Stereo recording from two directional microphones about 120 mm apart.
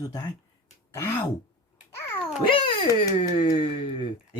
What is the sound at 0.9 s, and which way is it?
Speech, 20° left (ahead or behind).